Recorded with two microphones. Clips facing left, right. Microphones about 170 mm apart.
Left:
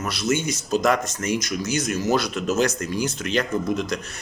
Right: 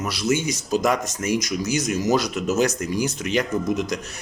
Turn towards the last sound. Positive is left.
turn(degrees=-15)  # may be behind; listen again after turning